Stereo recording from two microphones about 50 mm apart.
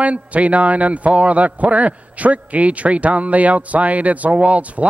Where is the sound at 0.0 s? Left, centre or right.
Right.